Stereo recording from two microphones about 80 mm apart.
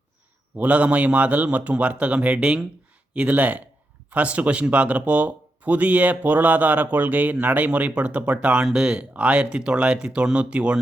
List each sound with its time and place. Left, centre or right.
0.5 s a man's voice: centre